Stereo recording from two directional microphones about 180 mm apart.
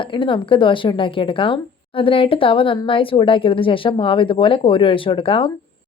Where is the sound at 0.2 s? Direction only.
30° left (ahead or behind).